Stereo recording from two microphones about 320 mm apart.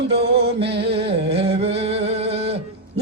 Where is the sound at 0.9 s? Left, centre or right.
Centre.